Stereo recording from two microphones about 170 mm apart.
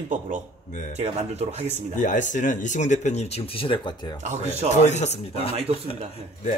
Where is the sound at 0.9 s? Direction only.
40° right (ahead or behind).